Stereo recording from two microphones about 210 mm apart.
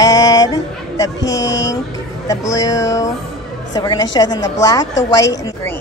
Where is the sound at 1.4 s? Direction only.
60° left (ahead or behind).